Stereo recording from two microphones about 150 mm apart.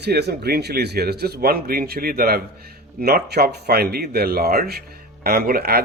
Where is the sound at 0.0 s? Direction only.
90° right.